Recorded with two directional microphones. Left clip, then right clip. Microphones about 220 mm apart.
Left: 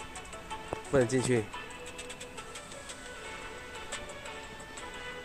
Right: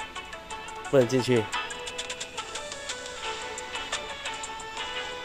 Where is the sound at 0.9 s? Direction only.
15° right (ahead or behind).